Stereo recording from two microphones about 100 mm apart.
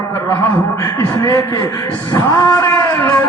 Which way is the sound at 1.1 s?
30° left (ahead or behind).